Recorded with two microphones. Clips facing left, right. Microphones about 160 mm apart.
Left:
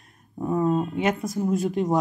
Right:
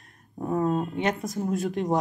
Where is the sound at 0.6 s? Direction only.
5° left (ahead or behind).